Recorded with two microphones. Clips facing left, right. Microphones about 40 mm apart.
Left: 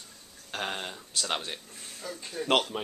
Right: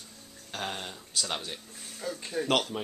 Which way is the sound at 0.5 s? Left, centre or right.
Centre.